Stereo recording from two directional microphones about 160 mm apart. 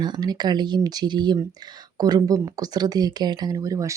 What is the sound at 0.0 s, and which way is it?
Speech, 25° right (ahead or behind).